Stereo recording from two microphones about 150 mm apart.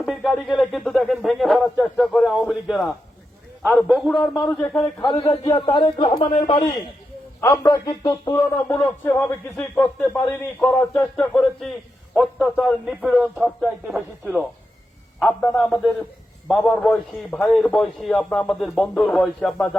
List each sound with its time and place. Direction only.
0.0 s speech: centre (ahead or behind)
4.9 s speech: 35° left (ahead or behind)
7.4 s speech: 25° left (ahead or behind)
12.1 s speech: 5° right (ahead or behind)
15.2 s speech: 5° left (ahead or behind)